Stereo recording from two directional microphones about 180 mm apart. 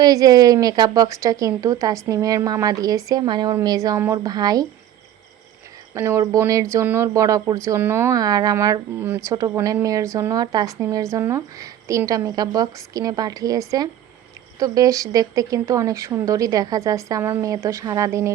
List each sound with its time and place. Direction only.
0.0 s speech: 20° right (ahead or behind)
5.9 s speech: 15° right (ahead or behind)